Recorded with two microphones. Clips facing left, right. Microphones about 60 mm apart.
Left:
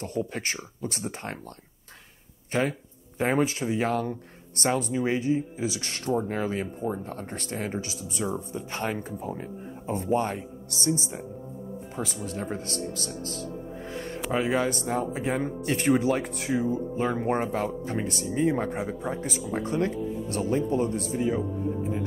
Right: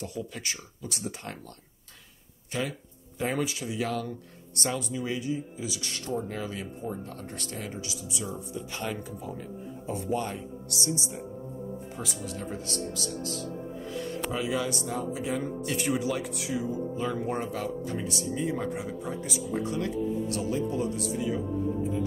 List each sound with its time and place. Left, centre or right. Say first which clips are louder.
0.0 s speech: left 5 dB; left
2.5 s speech: left 6 dB; left
13.8 s music: right 1 dB; left
14.3 s speech: left 6 dB; left